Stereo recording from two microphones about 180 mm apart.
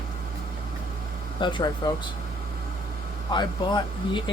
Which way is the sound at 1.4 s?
25° left (ahead or behind).